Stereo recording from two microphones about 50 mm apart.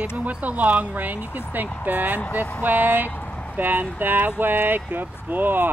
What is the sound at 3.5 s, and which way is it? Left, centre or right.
Speech, right.